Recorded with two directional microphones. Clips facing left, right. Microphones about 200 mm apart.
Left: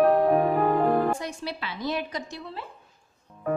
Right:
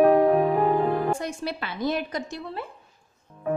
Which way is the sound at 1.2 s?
50° right (ahead or behind).